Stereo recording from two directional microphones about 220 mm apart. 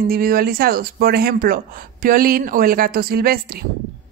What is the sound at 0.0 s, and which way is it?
A woman's voice, 40° right (ahead or behind).